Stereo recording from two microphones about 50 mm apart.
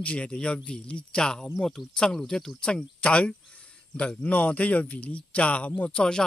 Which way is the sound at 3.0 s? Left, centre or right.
Left.